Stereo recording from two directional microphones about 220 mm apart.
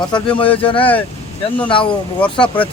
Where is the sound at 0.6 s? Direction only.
25° left (ahead or behind).